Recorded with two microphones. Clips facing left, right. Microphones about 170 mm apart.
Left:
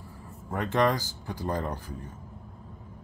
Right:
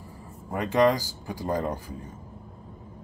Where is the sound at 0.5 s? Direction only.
10° right (ahead or behind).